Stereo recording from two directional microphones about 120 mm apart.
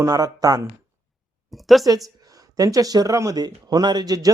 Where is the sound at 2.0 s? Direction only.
30° right (ahead or behind).